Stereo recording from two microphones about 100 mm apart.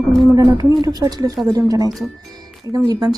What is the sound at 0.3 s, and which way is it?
Speech, 40° right (ahead or behind).